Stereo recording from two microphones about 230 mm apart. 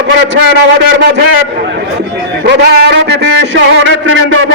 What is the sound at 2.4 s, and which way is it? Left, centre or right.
A man's voice, right.